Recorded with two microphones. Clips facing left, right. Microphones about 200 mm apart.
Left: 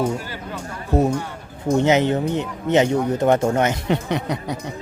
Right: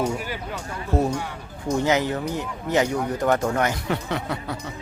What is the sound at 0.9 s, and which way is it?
Speech, 15° left (ahead or behind).